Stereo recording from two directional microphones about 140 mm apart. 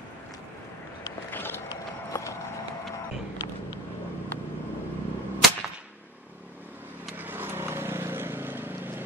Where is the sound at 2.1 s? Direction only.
15° left (ahead or behind).